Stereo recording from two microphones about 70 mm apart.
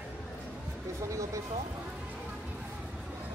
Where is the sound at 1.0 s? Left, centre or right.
Right.